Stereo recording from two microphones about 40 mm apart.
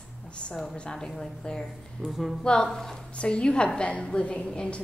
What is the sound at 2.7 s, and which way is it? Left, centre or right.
Speech, centre.